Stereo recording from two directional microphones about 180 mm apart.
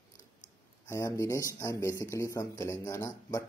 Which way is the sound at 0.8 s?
15° left (ahead or behind).